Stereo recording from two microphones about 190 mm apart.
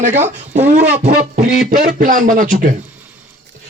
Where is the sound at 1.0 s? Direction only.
50° right (ahead or behind).